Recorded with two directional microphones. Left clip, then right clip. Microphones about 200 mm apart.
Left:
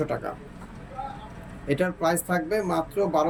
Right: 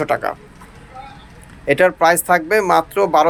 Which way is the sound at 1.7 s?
5° right (ahead or behind).